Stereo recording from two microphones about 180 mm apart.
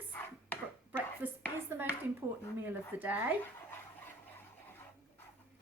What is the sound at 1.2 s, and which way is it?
Speech, 10° right (ahead or behind).